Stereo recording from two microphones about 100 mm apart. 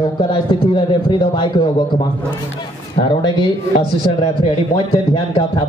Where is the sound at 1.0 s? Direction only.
50° left (ahead or behind).